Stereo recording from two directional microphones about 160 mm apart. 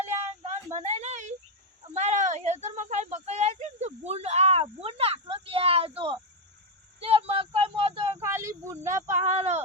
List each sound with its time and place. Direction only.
0.0 s a sound: 45° right (ahead or behind)
8.2 s speech: 15° right (ahead or behind)
9.1 s speech: 45° right (ahead or behind)